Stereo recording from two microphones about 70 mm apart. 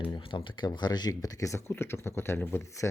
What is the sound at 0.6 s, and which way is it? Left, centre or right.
Speech, left.